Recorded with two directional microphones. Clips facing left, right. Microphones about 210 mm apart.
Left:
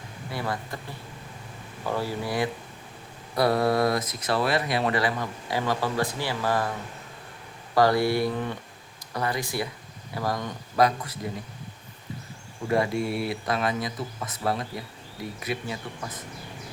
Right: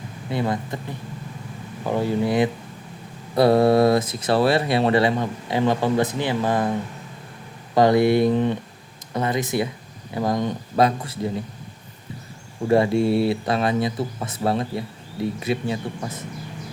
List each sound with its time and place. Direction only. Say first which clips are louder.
0.3 s speech: right 7 dB; 20° right (ahead or behind)
1.8 s speech: right 7 dB; 20° right (ahead or behind)
7.8 s speech: right 5 dB; 20° right (ahead or behind)
12.6 s speech: right 7 dB; 30° right (ahead or behind)